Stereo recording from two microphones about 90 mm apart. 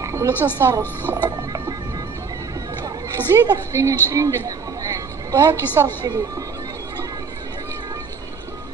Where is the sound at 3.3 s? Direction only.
35° right (ahead or behind).